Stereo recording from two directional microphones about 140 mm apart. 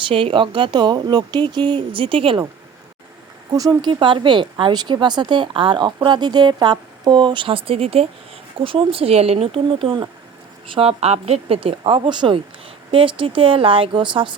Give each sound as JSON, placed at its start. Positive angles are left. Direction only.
{"t": 0.0, "sound": "speech", "side_deg": -40}
{"t": 3.5, "sound": "speech", "side_deg": -25}